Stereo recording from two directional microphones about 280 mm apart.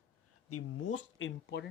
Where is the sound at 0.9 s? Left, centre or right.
Left.